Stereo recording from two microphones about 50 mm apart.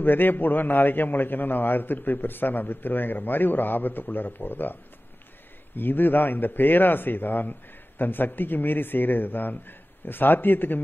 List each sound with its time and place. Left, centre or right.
0.0 s a man's voice: left
5.8 s a man's voice: left